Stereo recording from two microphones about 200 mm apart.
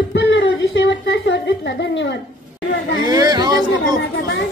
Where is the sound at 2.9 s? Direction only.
20° right (ahead or behind).